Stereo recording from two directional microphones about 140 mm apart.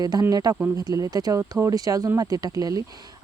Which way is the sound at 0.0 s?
25° right (ahead or behind).